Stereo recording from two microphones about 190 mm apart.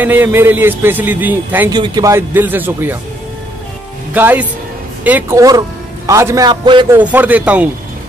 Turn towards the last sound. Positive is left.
turn(degrees=-10)  # may be behind; listen again after turning